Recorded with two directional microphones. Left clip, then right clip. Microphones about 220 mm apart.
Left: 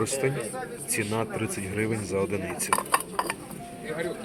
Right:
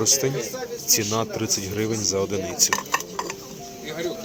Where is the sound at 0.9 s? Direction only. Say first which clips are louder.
Right 7 dB; 20° right (ahead or behind).